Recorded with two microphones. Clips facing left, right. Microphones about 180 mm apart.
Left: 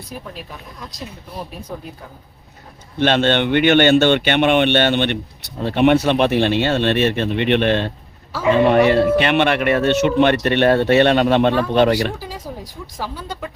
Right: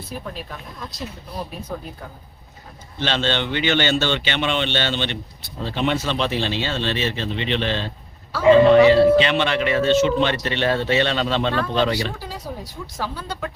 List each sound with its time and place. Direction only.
3.0 s speech: 55° left (ahead or behind)
13.0 s speech: 15° left (ahead or behind)